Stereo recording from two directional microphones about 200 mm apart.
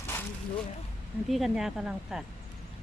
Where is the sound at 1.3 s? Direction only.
Centre (ahead or behind).